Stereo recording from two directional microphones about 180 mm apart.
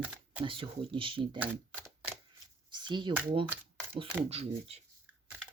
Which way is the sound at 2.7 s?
25° right (ahead or behind).